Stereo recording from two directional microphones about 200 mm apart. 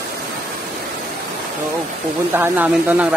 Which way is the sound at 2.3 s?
10° right (ahead or behind).